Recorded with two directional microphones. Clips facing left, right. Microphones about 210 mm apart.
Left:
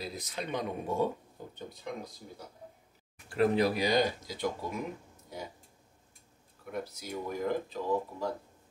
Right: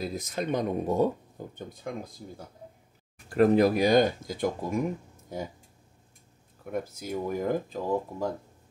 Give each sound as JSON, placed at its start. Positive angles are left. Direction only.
{"t": 0.0, "sound": "speech", "side_deg": -50}
{"t": 3.3, "sound": "speech", "side_deg": -50}
{"t": 6.6, "sound": "speech", "side_deg": -50}